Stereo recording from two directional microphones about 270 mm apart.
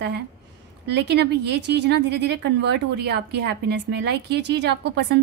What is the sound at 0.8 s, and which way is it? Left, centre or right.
A woman's voice, right.